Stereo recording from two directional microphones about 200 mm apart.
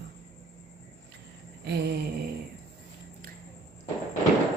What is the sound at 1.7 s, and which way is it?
Speech, 55° right (ahead or behind).